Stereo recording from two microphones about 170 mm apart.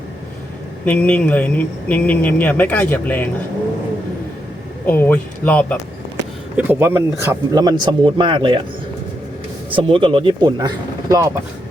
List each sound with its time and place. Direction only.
0.9 s speech: 10° left (ahead or behind)
4.9 s speech: 10° left (ahead or behind)
6.6 s speech: 15° right (ahead or behind); by 8.6 s 30° right (ahead or behind)
9.6 s speech: 30° right (ahead or behind)